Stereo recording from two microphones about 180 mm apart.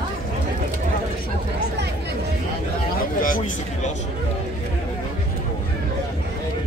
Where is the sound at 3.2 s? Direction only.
50° left (ahead or behind).